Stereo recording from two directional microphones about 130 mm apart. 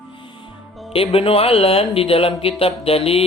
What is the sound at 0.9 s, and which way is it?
Speech, 45° left (ahead or behind).